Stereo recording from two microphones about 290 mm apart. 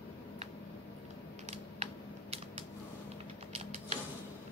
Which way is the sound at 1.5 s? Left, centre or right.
Right.